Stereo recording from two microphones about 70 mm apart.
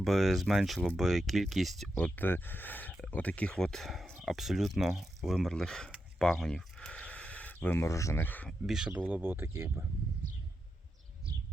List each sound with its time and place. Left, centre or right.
0.0 s speech: centre
2.1 s speech: left; by 5.5 s centre
5.5 s speech: centre
6.1 s a sound: centre; by 7.9 s left
7.9 s speech: left
8.1 s speech: left
8.6 s speech: centre
9.0 s speech: right
9.5 s speech: right